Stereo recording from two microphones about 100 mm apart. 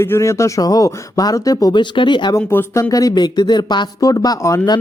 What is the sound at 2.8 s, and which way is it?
Speech, 40° left (ahead or behind).